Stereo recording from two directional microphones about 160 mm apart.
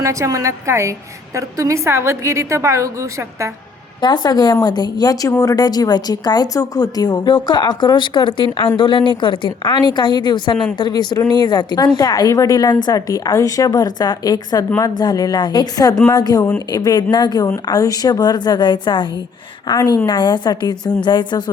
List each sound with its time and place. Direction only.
0.0 s a woman's voice: 20° right (ahead or behind)
4.0 s speech: 25° left (ahead or behind)